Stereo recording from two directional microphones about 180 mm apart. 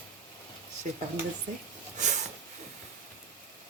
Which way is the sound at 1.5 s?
40° right (ahead or behind).